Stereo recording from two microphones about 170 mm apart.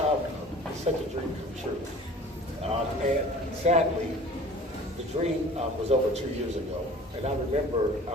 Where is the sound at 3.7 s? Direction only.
40° right (ahead or behind).